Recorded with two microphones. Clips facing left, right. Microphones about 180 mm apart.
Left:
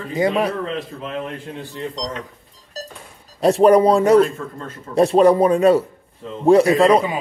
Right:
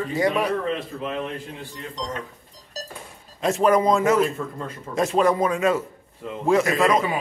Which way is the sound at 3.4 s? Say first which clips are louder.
Left 7 dB; 35° left (ahead or behind).